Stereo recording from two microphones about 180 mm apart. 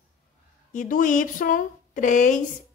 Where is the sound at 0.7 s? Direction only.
45° left (ahead or behind).